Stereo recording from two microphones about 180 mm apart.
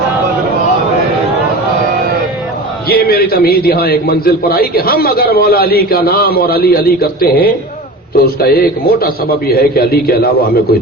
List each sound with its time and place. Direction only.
2.9 s a man's voice: 60° left (ahead or behind)